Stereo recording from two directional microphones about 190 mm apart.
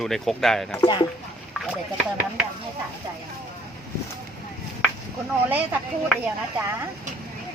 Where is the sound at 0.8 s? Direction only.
25° left (ahead or behind).